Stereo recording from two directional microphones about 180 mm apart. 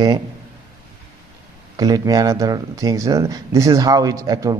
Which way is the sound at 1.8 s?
20° right (ahead or behind).